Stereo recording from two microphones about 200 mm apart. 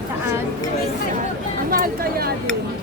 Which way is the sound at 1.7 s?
45° right (ahead or behind).